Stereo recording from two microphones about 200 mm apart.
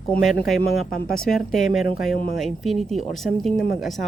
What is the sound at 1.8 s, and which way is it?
Speech, 45° left (ahead or behind).